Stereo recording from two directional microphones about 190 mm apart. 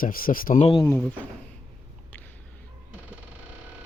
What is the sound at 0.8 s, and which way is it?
Speech, 5° left (ahead or behind).